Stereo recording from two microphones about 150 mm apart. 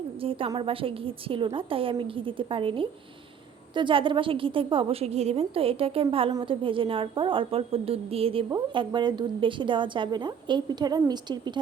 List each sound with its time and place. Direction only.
0.2 s a woman's voice: 40° right (ahead or behind)